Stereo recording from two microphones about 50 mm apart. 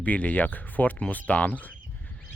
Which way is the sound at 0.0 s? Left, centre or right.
Left.